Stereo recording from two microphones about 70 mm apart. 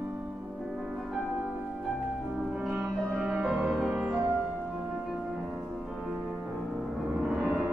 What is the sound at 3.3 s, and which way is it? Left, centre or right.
Music, centre.